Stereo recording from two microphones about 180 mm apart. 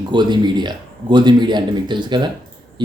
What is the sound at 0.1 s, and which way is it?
A man's voice, 25° right (ahead or behind).